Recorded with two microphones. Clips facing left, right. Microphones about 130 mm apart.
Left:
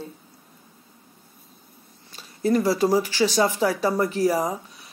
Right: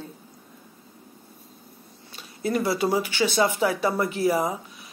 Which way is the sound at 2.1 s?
35° left (ahead or behind).